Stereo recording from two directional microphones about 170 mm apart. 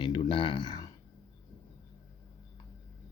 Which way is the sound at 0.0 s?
30° left (ahead or behind).